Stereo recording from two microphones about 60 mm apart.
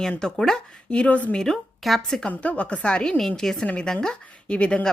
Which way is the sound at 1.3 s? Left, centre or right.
Centre.